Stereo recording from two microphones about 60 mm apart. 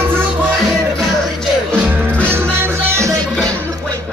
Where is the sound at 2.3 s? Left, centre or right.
Right.